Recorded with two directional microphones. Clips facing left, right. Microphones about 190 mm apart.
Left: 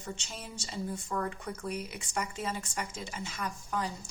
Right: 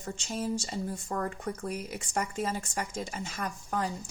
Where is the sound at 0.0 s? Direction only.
40° right (ahead or behind).